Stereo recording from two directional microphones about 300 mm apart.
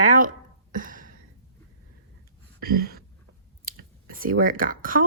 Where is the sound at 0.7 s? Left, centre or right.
Right.